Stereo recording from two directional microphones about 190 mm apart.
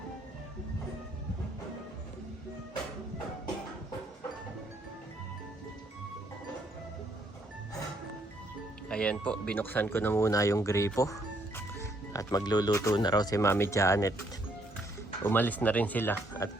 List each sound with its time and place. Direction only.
8.9 s speech: 5° left (ahead or behind)
15.2 s speech: 10° left (ahead or behind)